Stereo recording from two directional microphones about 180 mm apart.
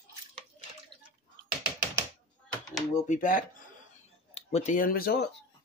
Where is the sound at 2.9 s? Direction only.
45° left (ahead or behind).